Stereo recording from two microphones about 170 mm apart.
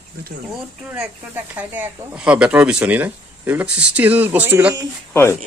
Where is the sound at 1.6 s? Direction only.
10° right (ahead or behind).